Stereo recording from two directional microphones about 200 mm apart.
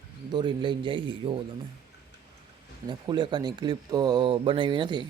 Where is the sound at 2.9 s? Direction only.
25° right (ahead or behind).